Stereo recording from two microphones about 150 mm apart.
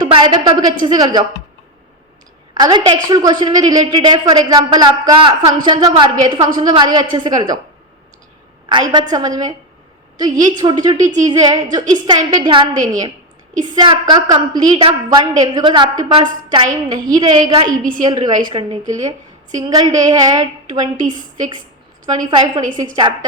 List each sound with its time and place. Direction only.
0.0 s speech: 30° right (ahead or behind)
2.6 s speech: 25° right (ahead or behind)
8.7 s a woman's voice: 30° right (ahead or behind)
17.7 s a woman's voice: 65° right (ahead or behind)
18.0 s speech: 25° right (ahead or behind)
20.9 s a woman's voice: 60° right (ahead or behind)
21.2 s a woman's voice: 30° right (ahead or behind)